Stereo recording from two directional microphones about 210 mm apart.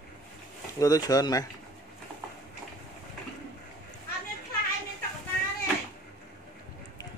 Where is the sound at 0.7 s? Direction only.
15° left (ahead or behind).